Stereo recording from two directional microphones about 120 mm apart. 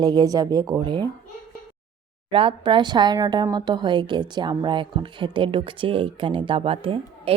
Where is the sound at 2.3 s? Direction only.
50° right (ahead or behind).